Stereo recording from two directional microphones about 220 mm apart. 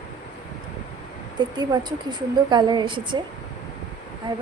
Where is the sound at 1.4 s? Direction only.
20° right (ahead or behind).